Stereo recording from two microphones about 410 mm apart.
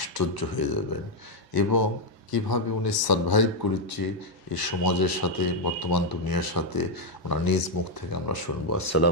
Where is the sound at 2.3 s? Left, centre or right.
Left.